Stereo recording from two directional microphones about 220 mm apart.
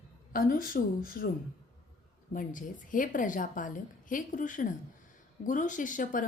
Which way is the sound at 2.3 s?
35° left (ahead or behind).